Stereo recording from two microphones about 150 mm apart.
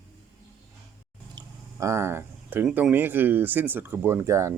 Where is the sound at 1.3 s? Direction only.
20° right (ahead or behind).